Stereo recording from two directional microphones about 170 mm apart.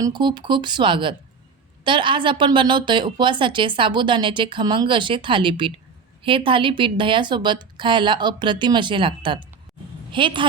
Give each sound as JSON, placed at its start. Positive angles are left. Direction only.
{"t": 0.0, "sound": "a woman's voice", "side_deg": -25}